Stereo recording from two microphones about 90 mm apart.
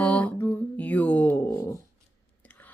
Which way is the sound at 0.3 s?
20° left (ahead or behind).